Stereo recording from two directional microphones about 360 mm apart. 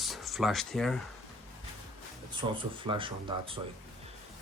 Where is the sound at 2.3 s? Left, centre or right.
Centre.